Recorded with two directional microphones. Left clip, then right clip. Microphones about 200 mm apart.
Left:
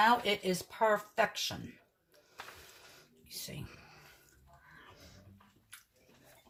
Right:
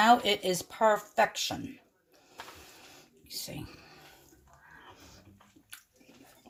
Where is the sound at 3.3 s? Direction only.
45° right (ahead or behind).